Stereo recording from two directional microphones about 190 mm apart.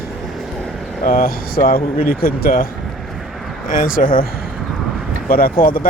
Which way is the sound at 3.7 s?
45° left (ahead or behind).